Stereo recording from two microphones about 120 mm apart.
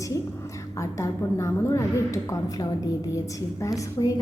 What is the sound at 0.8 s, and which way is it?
A woman's voice, 25° left (ahead or behind).